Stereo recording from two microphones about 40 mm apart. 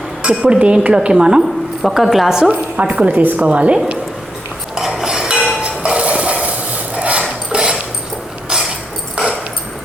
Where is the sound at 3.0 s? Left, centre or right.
Right.